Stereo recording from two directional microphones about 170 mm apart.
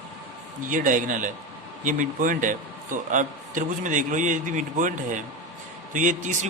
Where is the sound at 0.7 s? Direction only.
50° right (ahead or behind).